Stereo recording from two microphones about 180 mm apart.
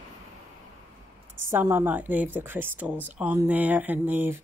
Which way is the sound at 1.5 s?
15° right (ahead or behind).